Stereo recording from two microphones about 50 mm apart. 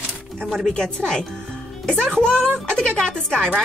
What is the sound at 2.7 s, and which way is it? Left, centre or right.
Speech, centre.